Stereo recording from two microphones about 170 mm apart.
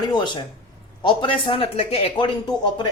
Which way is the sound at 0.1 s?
25° left (ahead or behind).